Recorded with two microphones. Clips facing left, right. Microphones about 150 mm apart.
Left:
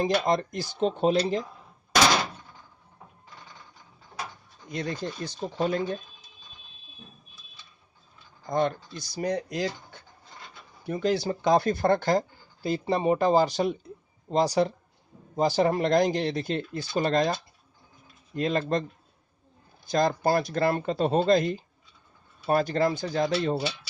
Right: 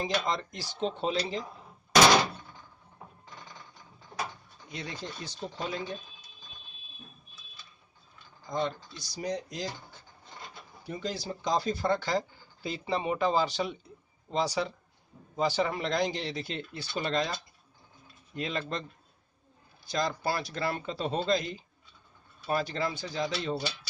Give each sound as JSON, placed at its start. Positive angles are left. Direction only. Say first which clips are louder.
{"t": 0.3, "sound": "speech", "louder": "left 7 dB", "side_deg": 50}
{"t": 4.7, "sound": "speech", "louder": "left 8 dB", "side_deg": 45}
{"t": 8.4, "sound": "speech", "louder": "left 6 dB", "side_deg": 55}
{"t": 18.3, "sound": "speech", "louder": "left 8 dB", "side_deg": 45}